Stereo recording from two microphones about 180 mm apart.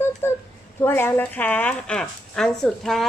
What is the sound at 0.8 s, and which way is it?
Speech, 10° left (ahead or behind).